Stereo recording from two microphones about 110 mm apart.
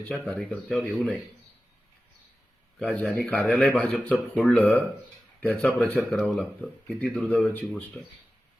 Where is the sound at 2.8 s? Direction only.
5° left (ahead or behind).